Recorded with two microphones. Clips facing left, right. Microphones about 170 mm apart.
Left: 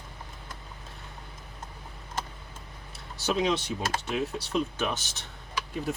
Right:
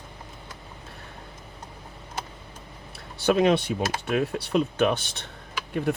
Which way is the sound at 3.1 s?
60° right (ahead or behind).